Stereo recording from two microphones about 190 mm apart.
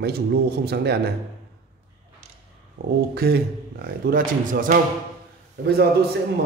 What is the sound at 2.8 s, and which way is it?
Speech, 50° right (ahead or behind).